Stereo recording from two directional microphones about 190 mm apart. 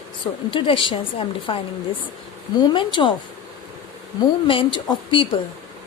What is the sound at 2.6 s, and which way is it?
Speech, 25° left (ahead or behind).